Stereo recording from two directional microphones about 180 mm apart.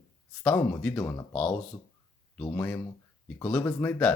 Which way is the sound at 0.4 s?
5° left (ahead or behind).